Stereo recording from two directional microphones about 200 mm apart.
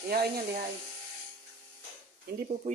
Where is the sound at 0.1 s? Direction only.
50° right (ahead or behind).